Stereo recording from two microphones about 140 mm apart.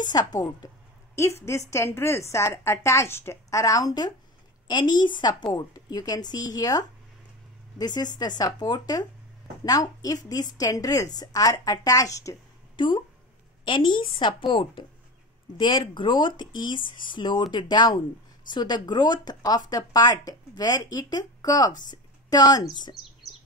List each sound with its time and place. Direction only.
0.0 s a woman's voice: 30° left (ahead or behind)
12.7 s a woman's voice: 35° left (ahead or behind)